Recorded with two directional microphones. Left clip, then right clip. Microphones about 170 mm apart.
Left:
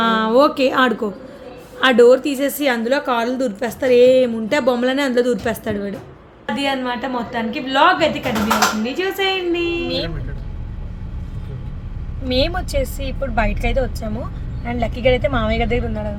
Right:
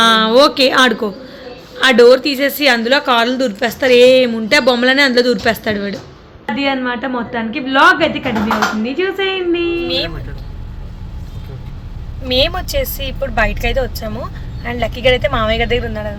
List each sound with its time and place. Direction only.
0.0 s a woman's voice: 5° left (ahead or behind)
12.3 s a woman's voice: centre (ahead or behind)